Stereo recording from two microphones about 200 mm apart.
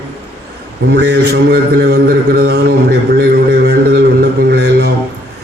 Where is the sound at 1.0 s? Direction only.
50° right (ahead or behind).